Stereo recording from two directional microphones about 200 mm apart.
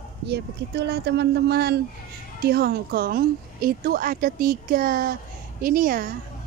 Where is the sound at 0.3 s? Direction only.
55° right (ahead or behind).